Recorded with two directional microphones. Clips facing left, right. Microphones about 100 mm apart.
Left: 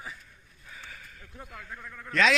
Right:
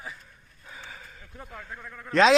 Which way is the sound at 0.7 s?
25° right (ahead or behind).